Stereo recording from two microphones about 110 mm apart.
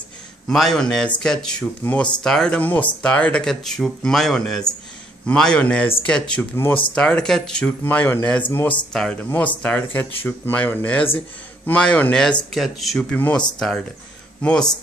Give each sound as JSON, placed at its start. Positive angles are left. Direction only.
{"t": 0.5, "sound": "a man's voice", "side_deg": 5}
{"t": 6.5, "sound": "speech", "side_deg": 20}
{"t": 7.0, "sound": "speech", "side_deg": 10}
{"t": 7.8, "sound": "a man's voice", "side_deg": 20}
{"t": 13.1, "sound": "a man's voice", "side_deg": 10}